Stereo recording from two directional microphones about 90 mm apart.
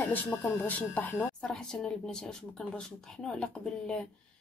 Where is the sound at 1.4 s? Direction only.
5° left (ahead or behind).